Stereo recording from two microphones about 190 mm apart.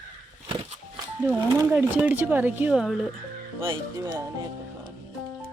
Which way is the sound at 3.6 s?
25° right (ahead or behind).